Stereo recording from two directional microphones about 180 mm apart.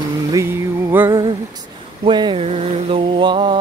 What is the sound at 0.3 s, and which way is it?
Music, 15° right (ahead or behind).